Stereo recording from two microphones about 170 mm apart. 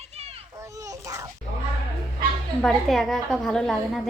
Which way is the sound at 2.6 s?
Centre (ahead or behind).